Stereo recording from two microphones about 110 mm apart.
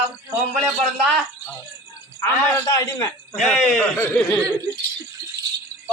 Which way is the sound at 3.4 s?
5° left (ahead or behind).